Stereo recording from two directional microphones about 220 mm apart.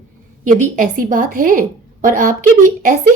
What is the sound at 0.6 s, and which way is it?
Speech, 35° right (ahead or behind).